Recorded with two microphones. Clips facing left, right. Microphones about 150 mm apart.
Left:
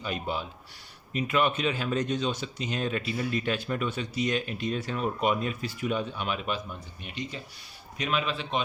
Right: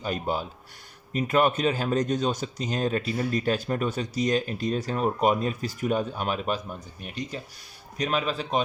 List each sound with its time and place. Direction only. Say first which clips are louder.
0.0 s speech: right 4 dB; 40° right (ahead or behind)